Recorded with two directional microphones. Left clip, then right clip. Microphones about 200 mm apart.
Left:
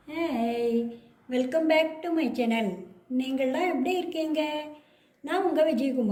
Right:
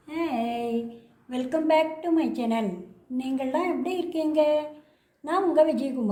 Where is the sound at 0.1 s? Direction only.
45° right (ahead or behind).